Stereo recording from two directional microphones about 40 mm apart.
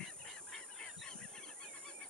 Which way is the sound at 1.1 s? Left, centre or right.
Centre.